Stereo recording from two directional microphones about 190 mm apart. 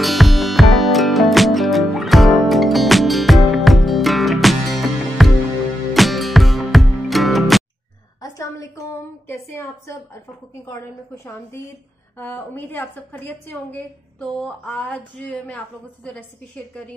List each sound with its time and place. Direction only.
0.0 s music: centre (ahead or behind)
8.2 s a sound: 15° left (ahead or behind)
12.2 s a woman's voice: 10° left (ahead or behind)